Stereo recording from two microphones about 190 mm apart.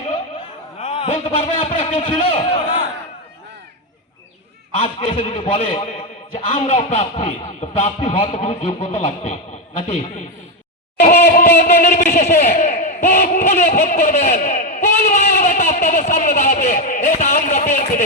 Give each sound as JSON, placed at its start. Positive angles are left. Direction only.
{"t": 0.8, "sound": "speech", "side_deg": 35}
{"t": 4.8, "sound": "speech", "side_deg": 30}
{"t": 11.0, "sound": "a sound", "side_deg": 50}
{"t": 12.4, "sound": "speech", "side_deg": 40}